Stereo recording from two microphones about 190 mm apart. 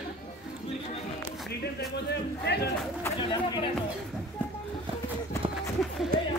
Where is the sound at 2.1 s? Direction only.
60° left (ahead or behind).